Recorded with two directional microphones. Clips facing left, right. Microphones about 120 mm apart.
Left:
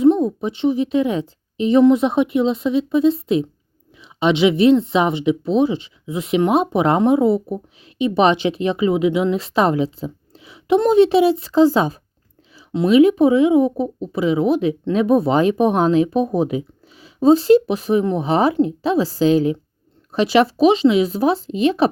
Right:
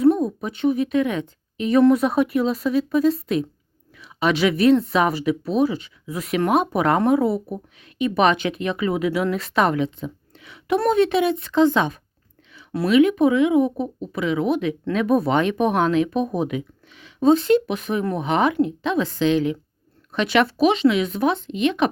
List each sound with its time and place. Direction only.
0.0 s a woman's voice: 25° left (ahead or behind)
12.7 s speech: 20° left (ahead or behind)
13.0 s speech: 30° left (ahead or behind)